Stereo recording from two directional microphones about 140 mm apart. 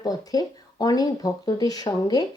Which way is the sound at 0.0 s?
25° left (ahead or behind).